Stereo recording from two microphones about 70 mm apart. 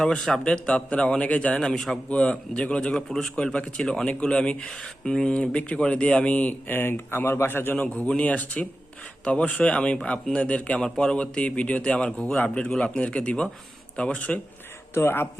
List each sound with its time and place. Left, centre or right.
0.0 s speech: centre
2.0 s speech: centre
3.1 s a man's voice: centre
3.3 s speech: centre; by 7.8 s left
7.8 s speech: centre
14.9 s speech: left